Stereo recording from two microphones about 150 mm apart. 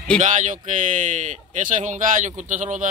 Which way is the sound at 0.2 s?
55° right (ahead or behind).